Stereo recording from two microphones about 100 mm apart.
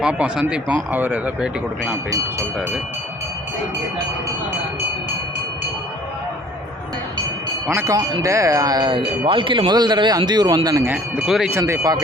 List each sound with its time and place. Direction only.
0.0 s speech: 10° right (ahead or behind)
2.0 s speech: 35° right (ahead or behind)
8.2 s speech: 30° right (ahead or behind)
10.8 s speech: 15° right (ahead or behind)
11.5 s speech: 30° right (ahead or behind)